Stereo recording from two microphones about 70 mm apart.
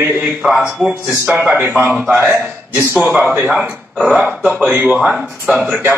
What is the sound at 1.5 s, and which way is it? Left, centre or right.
A man's voice, right.